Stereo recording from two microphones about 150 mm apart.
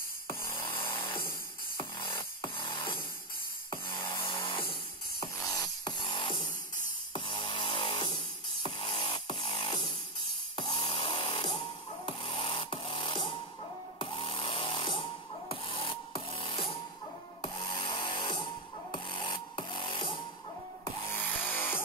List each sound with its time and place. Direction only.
0.3 s music: 15° left (ahead or behind)
1.8 s music: 30° left (ahead or behind)
4.0 s music: 15° left (ahead or behind)
4.3 s music: 35° left (ahead or behind)
5.2 s music: 25° left (ahead or behind)
17.4 s tools: 30° left (ahead or behind)
21.1 s chainsaw: 15° left (ahead or behind)